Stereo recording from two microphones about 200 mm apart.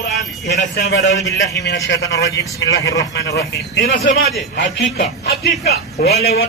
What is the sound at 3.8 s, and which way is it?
A man's voice, 40° left (ahead or behind).